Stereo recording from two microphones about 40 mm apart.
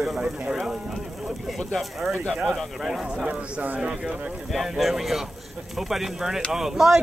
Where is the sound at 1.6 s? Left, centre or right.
Centre.